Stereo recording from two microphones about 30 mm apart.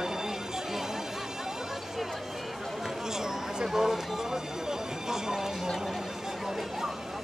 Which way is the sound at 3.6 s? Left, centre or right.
Centre.